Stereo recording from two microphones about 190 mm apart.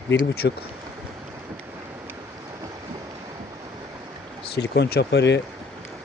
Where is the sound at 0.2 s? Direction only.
55° left (ahead or behind).